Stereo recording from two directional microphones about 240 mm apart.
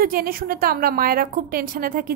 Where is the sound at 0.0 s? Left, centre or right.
Right.